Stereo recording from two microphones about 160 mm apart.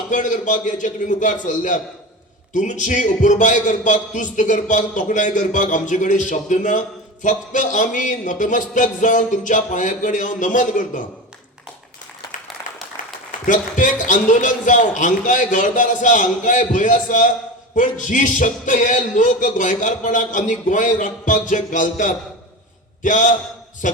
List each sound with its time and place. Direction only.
0.1 s a man's voice: 50° left (ahead or behind)
13.0 s a sound: 55° left (ahead or behind)
13.4 s a man's voice: 55° left (ahead or behind)